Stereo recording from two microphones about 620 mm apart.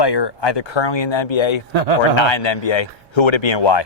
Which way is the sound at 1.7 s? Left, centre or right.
Right.